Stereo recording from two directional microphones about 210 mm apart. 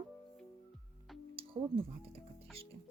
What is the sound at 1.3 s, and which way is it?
Music, 25° right (ahead or behind).